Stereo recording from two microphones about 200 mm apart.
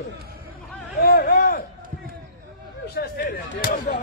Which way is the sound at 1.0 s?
50° left (ahead or behind).